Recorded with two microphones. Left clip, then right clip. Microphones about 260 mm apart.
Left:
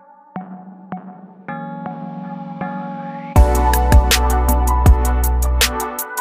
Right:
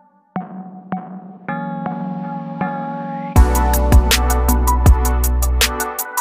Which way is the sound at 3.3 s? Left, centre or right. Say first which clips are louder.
Left 2 dB; centre.